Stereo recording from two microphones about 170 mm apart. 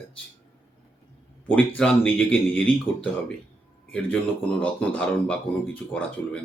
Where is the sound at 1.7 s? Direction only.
5° left (ahead or behind).